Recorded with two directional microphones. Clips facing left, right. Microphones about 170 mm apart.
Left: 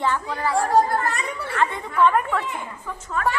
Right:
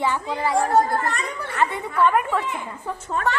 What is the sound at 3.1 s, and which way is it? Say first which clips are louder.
Speech: even; 30° right (ahead or behind).